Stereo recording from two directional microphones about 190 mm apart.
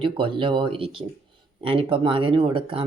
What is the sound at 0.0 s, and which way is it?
Speech, 25° right (ahead or behind).